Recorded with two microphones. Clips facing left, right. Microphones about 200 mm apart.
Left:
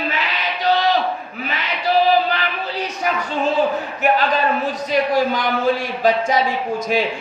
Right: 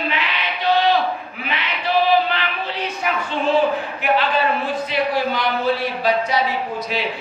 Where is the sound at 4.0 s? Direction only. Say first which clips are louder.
Left 2 dB; 40° left (ahead or behind).